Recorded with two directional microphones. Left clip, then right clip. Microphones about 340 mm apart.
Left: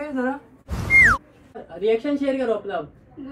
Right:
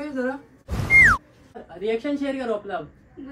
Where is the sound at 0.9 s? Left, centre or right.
Centre.